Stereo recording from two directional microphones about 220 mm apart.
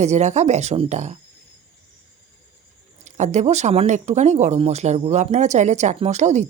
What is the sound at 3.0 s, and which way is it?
Speech, 30° right (ahead or behind).